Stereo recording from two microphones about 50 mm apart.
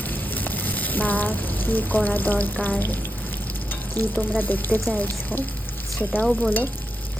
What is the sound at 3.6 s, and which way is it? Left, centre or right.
Frying, left.